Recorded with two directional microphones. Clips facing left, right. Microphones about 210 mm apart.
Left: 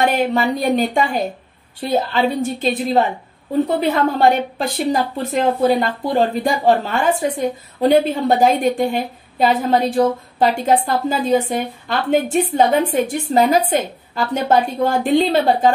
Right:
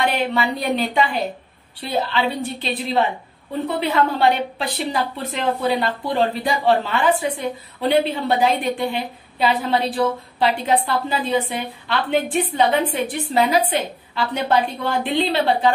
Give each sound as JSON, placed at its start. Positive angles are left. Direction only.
{"t": 0.0, "sound": "a woman's voice", "side_deg": 45}